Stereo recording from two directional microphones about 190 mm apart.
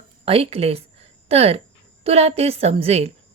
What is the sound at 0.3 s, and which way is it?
Speech, 30° right (ahead or behind).